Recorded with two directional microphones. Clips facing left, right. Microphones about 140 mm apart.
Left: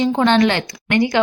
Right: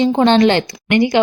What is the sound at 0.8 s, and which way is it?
Speech, 15° right (ahead or behind).